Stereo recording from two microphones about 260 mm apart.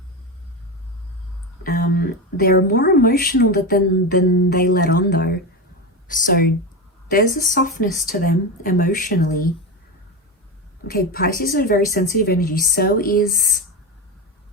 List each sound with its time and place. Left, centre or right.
1.6 s a woman's voice: left
10.8 s a woman's voice: left